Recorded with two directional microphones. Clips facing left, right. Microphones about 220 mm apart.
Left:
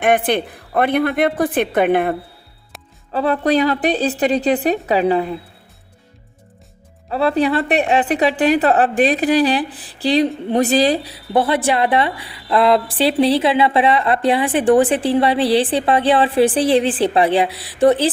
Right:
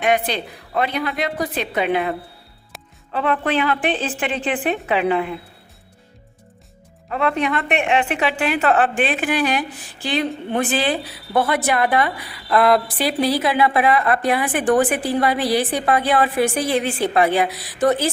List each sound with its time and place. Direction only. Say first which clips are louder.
0.0 s a woman's voice: left 4 dB; 50° left (ahead or behind)
2.7 s music: even; centre (ahead or behind)
3.1 s a woman's voice: left 4 dB; 35° left (ahead or behind)
7.1 s a woman's voice: left 4 dB; 35° left (ahead or behind)